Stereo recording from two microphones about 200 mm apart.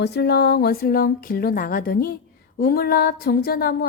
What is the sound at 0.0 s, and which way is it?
A woman's voice, 55° left (ahead or behind).